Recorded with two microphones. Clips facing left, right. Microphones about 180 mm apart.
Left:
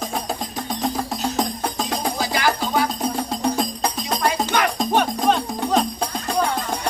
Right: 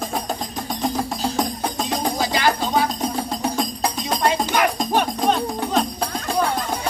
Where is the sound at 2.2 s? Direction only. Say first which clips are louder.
Right 1 dB; 25° right (ahead or behind).